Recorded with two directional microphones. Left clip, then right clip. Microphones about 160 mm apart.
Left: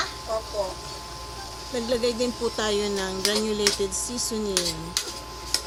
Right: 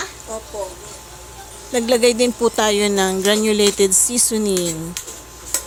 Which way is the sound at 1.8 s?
55° right (ahead or behind).